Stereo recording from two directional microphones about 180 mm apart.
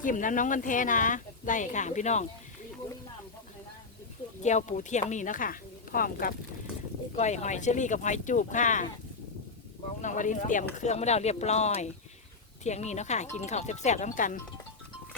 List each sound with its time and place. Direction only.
0.0 s speech: 45° left (ahead or behind)
4.4 s speech: 40° left (ahead or behind)
7.2 s speech: 40° left (ahead or behind)
10.0 s speech: 45° left (ahead or behind)